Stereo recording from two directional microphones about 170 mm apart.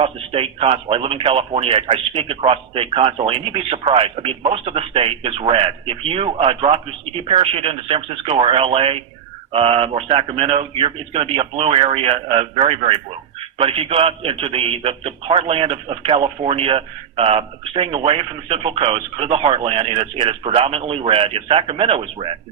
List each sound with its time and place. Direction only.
0.0 s speech: 35° right (ahead or behind)